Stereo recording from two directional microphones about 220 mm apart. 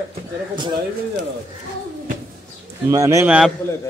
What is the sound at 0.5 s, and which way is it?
Speech, 20° right (ahead or behind).